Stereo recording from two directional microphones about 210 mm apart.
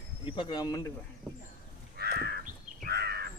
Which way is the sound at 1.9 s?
50° right (ahead or behind).